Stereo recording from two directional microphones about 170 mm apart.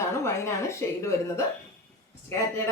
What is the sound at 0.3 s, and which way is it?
Speech, 15° left (ahead or behind).